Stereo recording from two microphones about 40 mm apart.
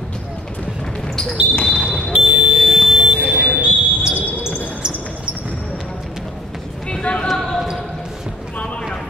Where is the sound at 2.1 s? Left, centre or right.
Right.